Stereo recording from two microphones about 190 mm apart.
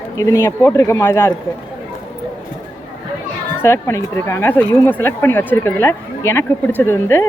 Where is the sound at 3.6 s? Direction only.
15° left (ahead or behind).